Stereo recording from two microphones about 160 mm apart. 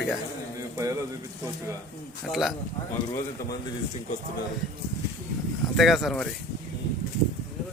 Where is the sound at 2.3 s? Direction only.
Centre (ahead or behind).